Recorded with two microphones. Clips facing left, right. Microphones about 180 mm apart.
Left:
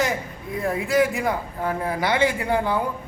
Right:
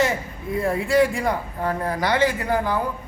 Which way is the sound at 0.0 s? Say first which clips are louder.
Right 2 dB; centre (ahead or behind).